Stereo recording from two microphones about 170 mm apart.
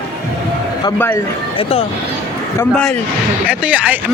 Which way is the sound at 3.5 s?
10° right (ahead or behind).